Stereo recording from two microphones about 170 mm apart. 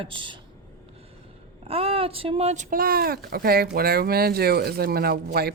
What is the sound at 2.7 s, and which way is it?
Speech, 60° right (ahead or behind).